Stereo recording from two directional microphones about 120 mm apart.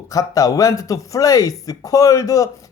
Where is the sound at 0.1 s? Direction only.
30° left (ahead or behind).